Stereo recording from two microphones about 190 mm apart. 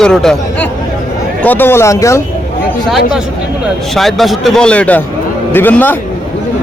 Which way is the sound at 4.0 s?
Centre (ahead or behind).